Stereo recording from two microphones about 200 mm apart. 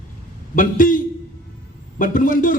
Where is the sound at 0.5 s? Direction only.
40° left (ahead or behind).